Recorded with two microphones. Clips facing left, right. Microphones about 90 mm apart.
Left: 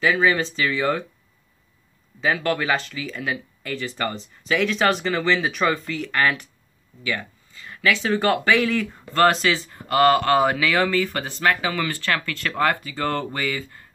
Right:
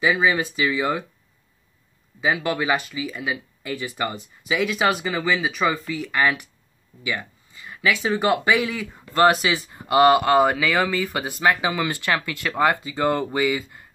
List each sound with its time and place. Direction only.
0.0 s speech: 15° right (ahead or behind)
2.1 s speech: 15° right (ahead or behind)
10.3 s speech: centre (ahead or behind)